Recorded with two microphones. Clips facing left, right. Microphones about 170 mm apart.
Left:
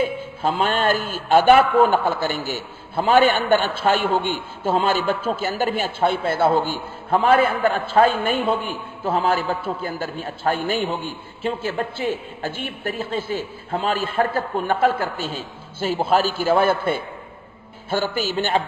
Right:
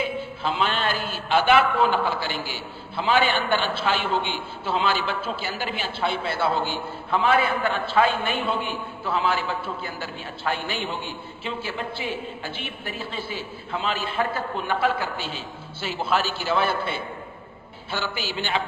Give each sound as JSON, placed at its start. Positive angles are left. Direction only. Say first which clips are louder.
{"t": 0.0, "sound": "a man's voice", "louder": "left 5 dB", "side_deg": 45}